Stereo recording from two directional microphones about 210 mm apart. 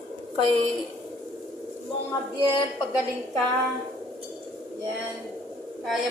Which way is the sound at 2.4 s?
25° left (ahead or behind).